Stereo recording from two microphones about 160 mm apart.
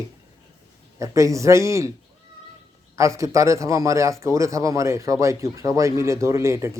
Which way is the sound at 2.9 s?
20° right (ahead or behind).